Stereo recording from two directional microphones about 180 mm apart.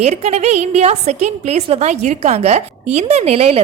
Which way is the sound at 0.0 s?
35° right (ahead or behind).